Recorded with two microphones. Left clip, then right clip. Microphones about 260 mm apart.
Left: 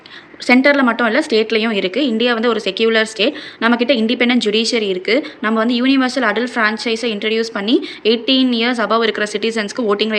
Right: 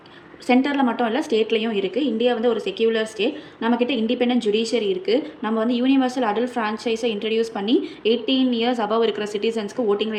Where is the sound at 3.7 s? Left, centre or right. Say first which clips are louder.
Left 7 dB; left.